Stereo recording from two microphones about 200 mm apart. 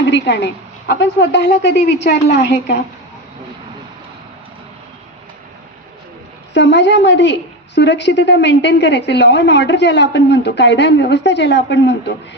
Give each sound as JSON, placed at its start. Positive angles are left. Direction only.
{"t": 0.0, "sound": "a woman's voice", "side_deg": 60}
{"t": 6.5, "sound": "a woman's voice", "side_deg": 60}